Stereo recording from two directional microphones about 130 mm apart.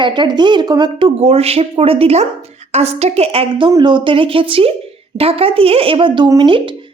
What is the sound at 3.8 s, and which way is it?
A woman's voice, 40° right (ahead or behind).